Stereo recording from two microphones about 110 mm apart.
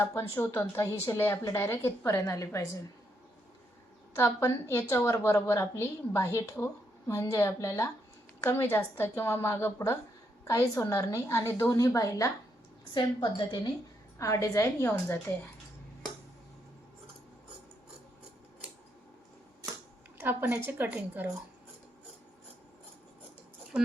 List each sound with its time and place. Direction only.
0.0 s a woman's voice: 25° left (ahead or behind)
4.1 s a woman's voice: 25° left (ahead or behind)
14.2 s a woman's voice: 30° left (ahead or behind)
20.1 s a woman's voice: 20° right (ahead or behind)
23.7 s speech: 10° right (ahead or behind)